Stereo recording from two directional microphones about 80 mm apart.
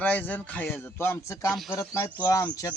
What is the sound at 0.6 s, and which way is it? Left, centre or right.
Speech, left.